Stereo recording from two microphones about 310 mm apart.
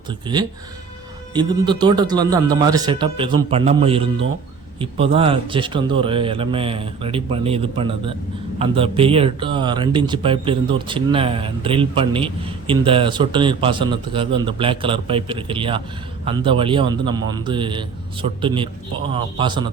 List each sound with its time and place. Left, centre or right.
0.1 s speech: centre